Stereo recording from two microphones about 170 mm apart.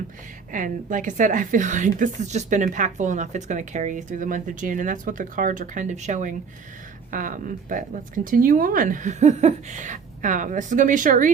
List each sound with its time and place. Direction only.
0.5 s speech: 50° right (ahead or behind)